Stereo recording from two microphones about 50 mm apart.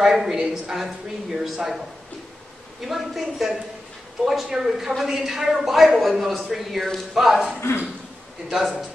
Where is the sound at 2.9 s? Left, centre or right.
Centre.